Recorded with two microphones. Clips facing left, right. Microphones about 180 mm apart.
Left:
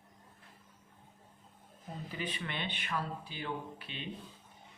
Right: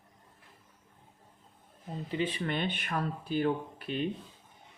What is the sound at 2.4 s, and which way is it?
Speech, 45° right (ahead or behind).